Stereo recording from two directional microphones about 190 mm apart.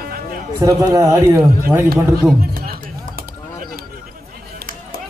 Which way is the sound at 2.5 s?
50° right (ahead or behind).